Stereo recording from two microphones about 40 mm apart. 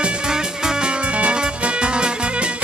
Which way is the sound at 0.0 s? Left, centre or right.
Centre.